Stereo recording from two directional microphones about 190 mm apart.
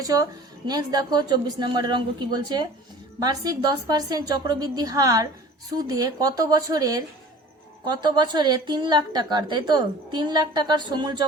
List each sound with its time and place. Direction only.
0.0 s a woman's voice: 20° right (ahead or behind)